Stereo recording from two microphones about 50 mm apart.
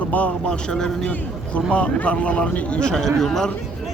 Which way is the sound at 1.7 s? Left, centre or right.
Left.